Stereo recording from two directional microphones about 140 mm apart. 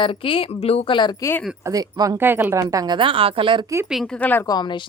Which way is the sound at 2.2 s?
15° right (ahead or behind).